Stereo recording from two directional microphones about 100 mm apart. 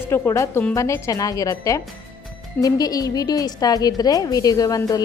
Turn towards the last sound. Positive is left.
turn(degrees=40)  # may be behind; listen again after turning